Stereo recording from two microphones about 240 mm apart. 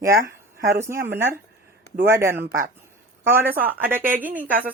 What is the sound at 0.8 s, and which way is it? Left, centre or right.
Speech, centre.